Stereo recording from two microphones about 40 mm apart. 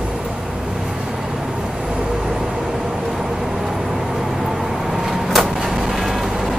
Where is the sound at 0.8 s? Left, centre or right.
Centre.